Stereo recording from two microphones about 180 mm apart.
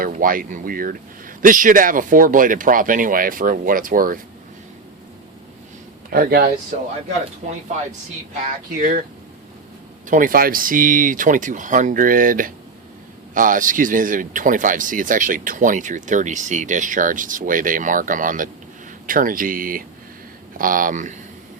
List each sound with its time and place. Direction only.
0.0 s speech: 50° right (ahead or behind)
6.1 s speech: 55° right (ahead or behind)
6.7 s speech: 40° right (ahead or behind)
8.8 s speech: 50° right (ahead or behind)
10.1 s speech: 50° right (ahead or behind)